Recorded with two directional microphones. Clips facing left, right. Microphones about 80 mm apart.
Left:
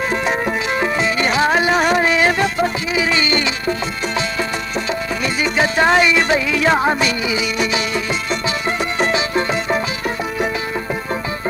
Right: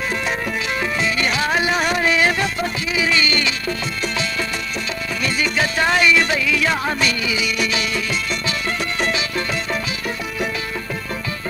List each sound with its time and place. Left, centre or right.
0.1 s music: left
2.1 s music: centre
5.2 s music: left